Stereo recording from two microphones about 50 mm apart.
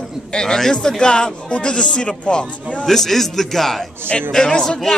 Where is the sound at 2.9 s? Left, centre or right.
Centre.